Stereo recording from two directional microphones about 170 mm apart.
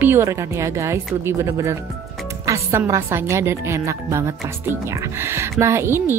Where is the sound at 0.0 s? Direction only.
15° right (ahead or behind).